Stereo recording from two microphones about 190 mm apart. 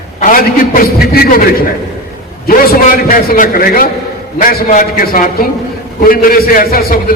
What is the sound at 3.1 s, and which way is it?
A man's voice, 45° left (ahead or behind).